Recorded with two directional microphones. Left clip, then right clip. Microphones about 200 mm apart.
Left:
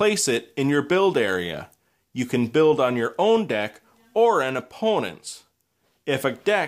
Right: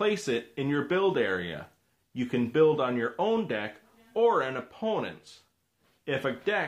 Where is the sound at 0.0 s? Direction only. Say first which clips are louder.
Left 7 dB; 45° left (ahead or behind).